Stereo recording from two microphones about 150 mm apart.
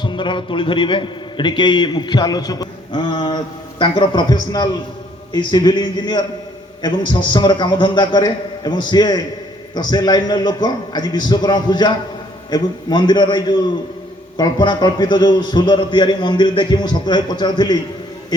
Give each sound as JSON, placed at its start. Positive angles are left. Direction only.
{"t": 0.0, "sound": "a man's voice", "side_deg": 30}